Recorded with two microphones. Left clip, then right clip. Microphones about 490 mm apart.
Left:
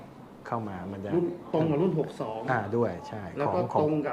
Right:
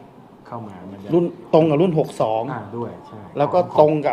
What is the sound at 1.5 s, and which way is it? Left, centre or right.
Speech, right.